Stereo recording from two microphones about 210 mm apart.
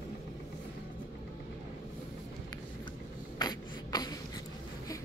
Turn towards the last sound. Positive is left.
turn(degrees=20)  # may be behind; listen again after turning